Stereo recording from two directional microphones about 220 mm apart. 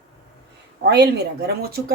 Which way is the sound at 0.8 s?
50° right (ahead or behind).